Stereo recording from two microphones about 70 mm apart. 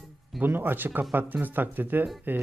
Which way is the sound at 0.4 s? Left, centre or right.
Right.